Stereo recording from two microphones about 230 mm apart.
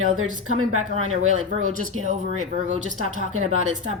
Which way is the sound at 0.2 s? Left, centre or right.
Right.